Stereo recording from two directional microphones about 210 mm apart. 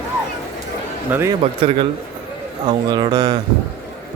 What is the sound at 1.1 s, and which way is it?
Speech, 10° right (ahead or behind).